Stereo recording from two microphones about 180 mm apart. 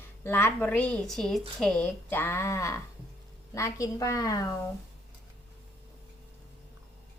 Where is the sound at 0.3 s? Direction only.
10° left (ahead or behind).